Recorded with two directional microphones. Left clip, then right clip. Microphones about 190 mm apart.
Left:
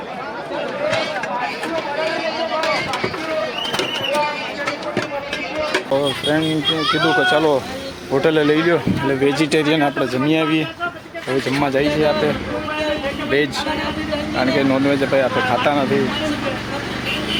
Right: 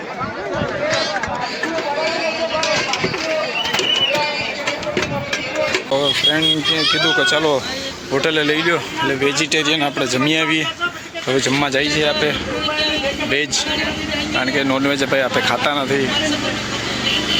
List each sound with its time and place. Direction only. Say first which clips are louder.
5.9 s speech: right 3 dB; 10° left (ahead or behind); by 9.9 s 25° left (ahead or behind)
10.2 s a man's voice: right 1 dB; centre (ahead or behind)
14.3 s speech: left 1 dB; 5° right (ahead or behind)